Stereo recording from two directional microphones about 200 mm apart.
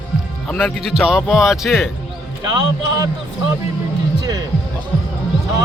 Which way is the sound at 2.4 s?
20° right (ahead or behind).